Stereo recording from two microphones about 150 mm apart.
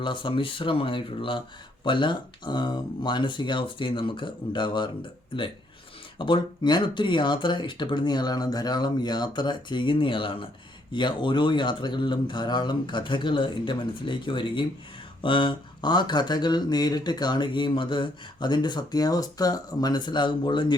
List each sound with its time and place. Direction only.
0.0 s speech: 35° left (ahead or behind)
6.1 s speech: 30° left (ahead or behind)